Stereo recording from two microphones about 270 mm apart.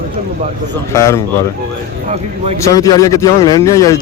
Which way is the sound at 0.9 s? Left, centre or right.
Centre.